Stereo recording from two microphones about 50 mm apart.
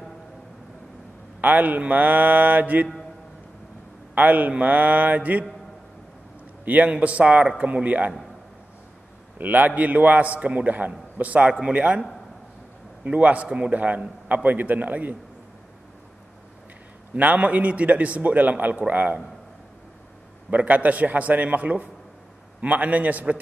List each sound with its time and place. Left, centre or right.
1.4 s a man's voice: right
4.1 s a man's voice: right
6.6 s a man's voice: right
9.4 s a man's voice: right
13.0 s a man's voice: right
17.1 s a man's voice: right
20.4 s a man's voice: right